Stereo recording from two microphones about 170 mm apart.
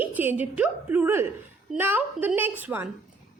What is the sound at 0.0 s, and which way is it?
A woman's voice, 10° right (ahead or behind).